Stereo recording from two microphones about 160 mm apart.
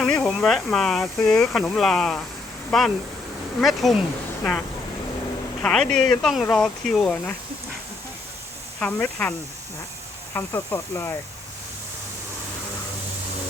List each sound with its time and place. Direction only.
0.0 s speech: 5° left (ahead or behind)
5.6 s speech: 5° left (ahead or behind)
8.8 s speech: 10° left (ahead or behind)
10.3 s speech: 15° left (ahead or behind)